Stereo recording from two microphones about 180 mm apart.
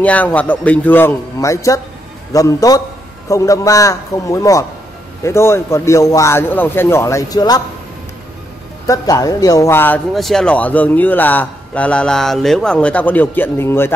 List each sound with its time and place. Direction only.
0.0 s a man's voice: 10° left (ahead or behind)
8.8 s speech: 20° left (ahead or behind)